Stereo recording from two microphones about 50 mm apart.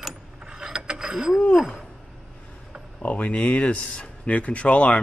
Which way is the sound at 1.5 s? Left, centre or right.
Centre.